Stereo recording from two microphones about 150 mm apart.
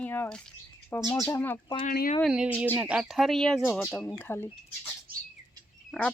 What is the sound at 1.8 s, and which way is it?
Speech, 70° left (ahead or behind).